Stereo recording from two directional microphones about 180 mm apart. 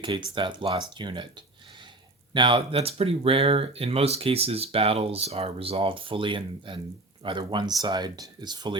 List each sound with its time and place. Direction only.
0.3 s speech: 25° right (ahead or behind)
2.3 s speech: 25° right (ahead or behind)